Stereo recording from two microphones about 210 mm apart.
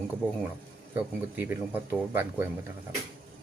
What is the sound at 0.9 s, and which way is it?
A man's voice, 10° right (ahead or behind).